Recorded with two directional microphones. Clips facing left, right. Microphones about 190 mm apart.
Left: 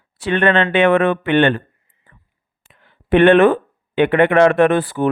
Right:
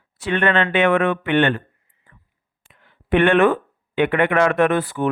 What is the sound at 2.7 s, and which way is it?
Speech, 30° left (ahead or behind).